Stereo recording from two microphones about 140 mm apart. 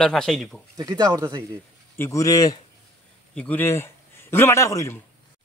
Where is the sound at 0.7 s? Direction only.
25° right (ahead or behind).